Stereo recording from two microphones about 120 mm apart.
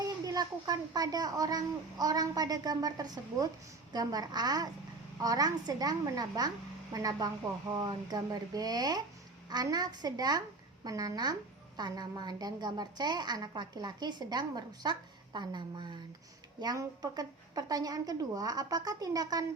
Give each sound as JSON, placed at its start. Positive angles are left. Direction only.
{"t": 0.0, "sound": "a woman's voice", "side_deg": -35}